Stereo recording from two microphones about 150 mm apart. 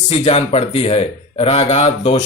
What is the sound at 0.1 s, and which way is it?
A man's voice, 45° left (ahead or behind).